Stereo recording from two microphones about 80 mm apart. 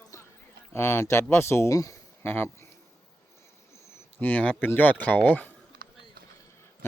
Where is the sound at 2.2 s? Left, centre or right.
Left.